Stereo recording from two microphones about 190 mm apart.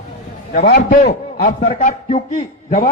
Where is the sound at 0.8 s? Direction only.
40° left (ahead or behind).